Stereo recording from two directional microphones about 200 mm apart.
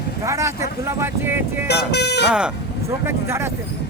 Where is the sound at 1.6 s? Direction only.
55° left (ahead or behind).